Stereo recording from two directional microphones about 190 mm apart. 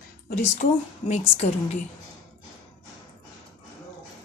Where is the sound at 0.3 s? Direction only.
40° left (ahead or behind).